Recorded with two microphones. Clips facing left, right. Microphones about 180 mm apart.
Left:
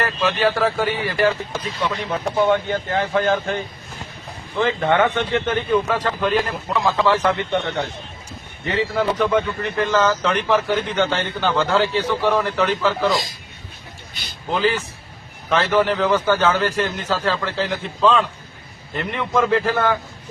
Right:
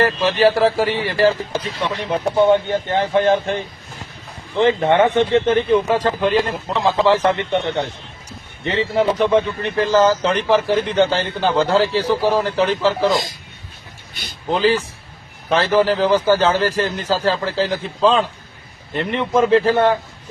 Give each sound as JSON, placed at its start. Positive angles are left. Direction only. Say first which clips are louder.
{"t": 0.0, "sound": "speech", "louder": "right 5 dB", "side_deg": -30}
{"t": 4.5, "sound": "speech", "louder": "right 4 dB", "side_deg": -25}
{"t": 8.6, "sound": "speech", "louder": "right 3 dB", "side_deg": -25}
{"t": 14.5, "sound": "speech", "louder": "right 4 dB", "side_deg": -35}